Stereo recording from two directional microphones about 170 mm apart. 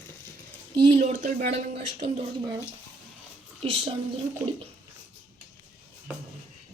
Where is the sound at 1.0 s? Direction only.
45° right (ahead or behind).